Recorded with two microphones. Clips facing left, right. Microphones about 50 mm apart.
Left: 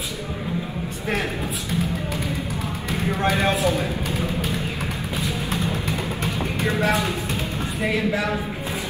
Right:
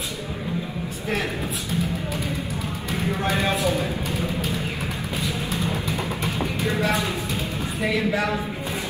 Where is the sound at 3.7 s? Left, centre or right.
Left.